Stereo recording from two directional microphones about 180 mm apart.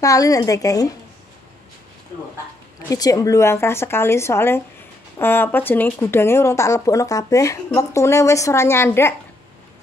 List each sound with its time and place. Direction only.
0.0 s a woman's voice: 20° left (ahead or behind)
2.9 s speech: 20° left (ahead or behind)